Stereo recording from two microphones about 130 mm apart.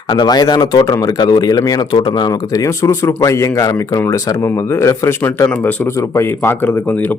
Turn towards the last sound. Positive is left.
turn(degrees=15)  # may be behind; listen again after turning